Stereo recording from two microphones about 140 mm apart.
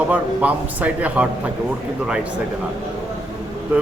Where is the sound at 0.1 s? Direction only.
10° right (ahead or behind).